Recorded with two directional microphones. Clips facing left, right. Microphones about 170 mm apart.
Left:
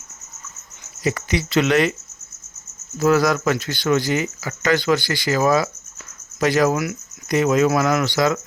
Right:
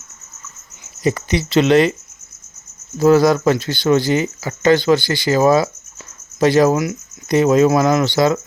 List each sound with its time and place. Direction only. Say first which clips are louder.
1.0 s speech: right 4 dB; 25° right (ahead or behind)
3.0 s speech: right 5 dB; 30° right (ahead or behind)